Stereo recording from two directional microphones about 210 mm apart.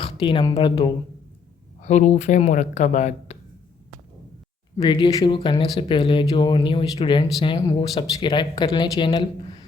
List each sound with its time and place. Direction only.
0.2 s speech: 20° left (ahead or behind)
1.8 s speech: 35° left (ahead or behind)
4.8 s speech: 20° left (ahead or behind)